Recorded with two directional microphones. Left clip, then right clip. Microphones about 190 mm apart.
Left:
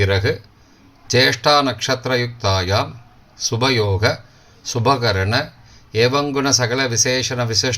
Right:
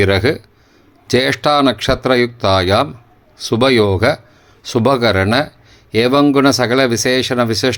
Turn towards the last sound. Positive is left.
turn(degrees=-45)  # may be behind; listen again after turning